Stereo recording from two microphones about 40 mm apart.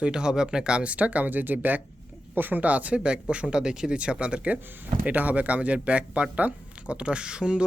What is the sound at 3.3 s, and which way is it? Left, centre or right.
Speech, right.